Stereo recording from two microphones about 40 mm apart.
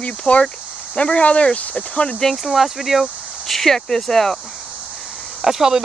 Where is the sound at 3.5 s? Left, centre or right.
Centre.